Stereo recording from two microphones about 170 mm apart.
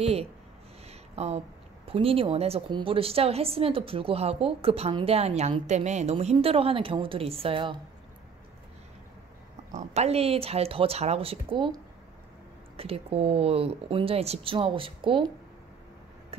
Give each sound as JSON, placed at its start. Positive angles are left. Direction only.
{"t": 0.0, "sound": "a woman's voice", "side_deg": -35}
{"t": 0.8, "sound": "a sound", "side_deg": -40}
{"t": 1.9, "sound": "a woman's voice", "side_deg": -35}
{"t": 9.7, "sound": "a woman's voice", "side_deg": -40}